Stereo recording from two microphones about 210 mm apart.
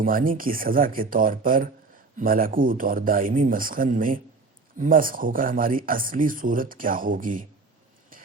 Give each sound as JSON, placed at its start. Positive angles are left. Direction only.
{"t": 0.0, "sound": "speech", "side_deg": -40}